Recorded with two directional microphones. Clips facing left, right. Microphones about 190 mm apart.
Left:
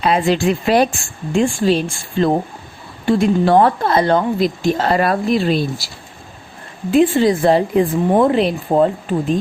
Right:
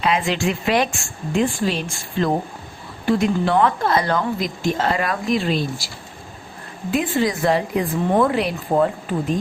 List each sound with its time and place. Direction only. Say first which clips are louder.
0.0 s speech: left 5 dB; 35° left (ahead or behind)
6.9 s a woman's voice: left 8 dB; 30° left (ahead or behind)